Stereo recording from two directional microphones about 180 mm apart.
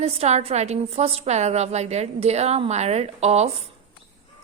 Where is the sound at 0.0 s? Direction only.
35° right (ahead or behind).